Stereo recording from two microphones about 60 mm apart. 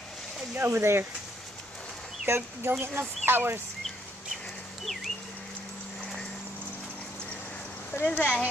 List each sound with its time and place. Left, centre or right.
0.6 s speech: right
2.2 s speech: right
7.9 s speech: left